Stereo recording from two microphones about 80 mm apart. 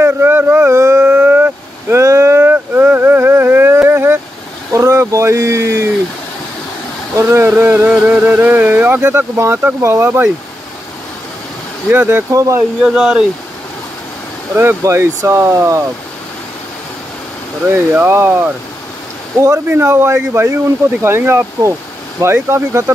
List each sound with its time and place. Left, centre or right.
0.0 s a sound: right
0.7 s howl: right
1.0 s vehicle: right
4.7 s a sound: right
7.2 s speech: right
11.9 s speech: right
12.3 s speech: right
12.8 s speech: centre
14.5 s speech: right
14.8 s speech: right
17.6 s speech: right
19.3 s speech: right
19.7 s speech: right